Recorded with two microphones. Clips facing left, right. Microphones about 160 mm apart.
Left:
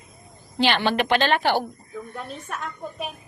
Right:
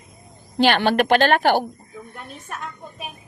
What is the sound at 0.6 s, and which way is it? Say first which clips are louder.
A woman's voice: right 4 dB; 50° right (ahead or behind).